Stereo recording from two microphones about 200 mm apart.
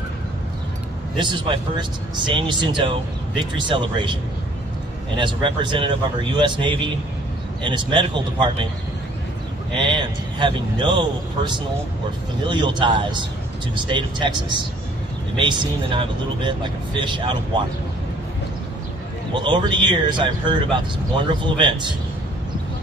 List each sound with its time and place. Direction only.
1.1 s speech: 25° right (ahead or behind)
9.8 s speech: 25° right (ahead or behind)
19.3 s speech: 25° right (ahead or behind)